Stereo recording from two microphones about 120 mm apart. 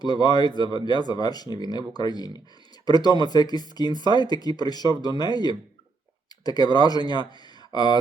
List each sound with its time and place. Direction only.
0.0 s speech: 35° left (ahead or behind)